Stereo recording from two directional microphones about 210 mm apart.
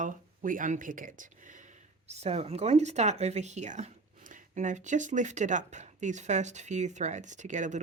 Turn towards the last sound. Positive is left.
turn(degrees=-35)  # may be behind; listen again after turning